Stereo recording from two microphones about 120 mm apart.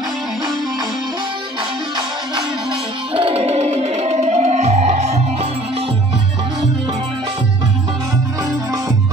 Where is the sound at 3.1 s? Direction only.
50° right (ahead or behind); by 5.2 s 65° right (ahead or behind).